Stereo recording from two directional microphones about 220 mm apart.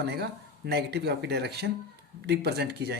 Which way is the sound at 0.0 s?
50° right (ahead or behind).